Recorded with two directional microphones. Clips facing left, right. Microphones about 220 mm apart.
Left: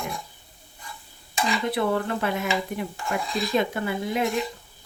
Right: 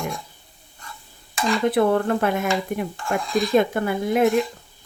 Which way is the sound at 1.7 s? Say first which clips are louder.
Right 7 dB; 50° right (ahead or behind).